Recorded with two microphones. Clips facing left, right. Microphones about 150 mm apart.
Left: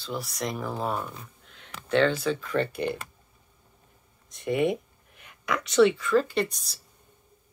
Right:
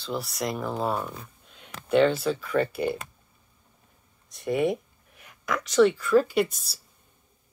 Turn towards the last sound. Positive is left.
turn(degrees=-5)  # may be behind; listen again after turning